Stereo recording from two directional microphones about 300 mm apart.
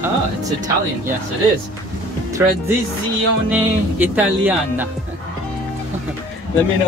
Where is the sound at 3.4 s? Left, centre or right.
Centre.